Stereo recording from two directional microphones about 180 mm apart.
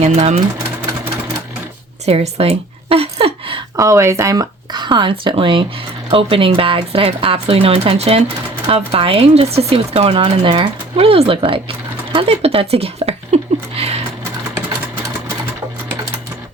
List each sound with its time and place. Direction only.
0.0 s speech: 35° right (ahead or behind)
2.0 s speech: 35° right (ahead or behind)
3.8 s speech: 15° right (ahead or behind); by 13.9 s 35° right (ahead or behind)